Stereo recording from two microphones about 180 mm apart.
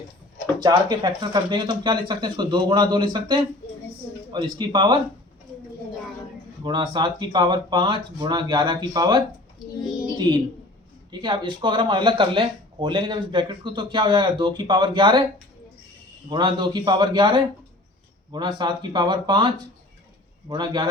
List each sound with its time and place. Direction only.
0.6 s speech: 25° right (ahead or behind)
6.7 s speech: 25° right (ahead or behind)
11.1 s speech: 25° right (ahead or behind)
16.3 s speech: 25° right (ahead or behind)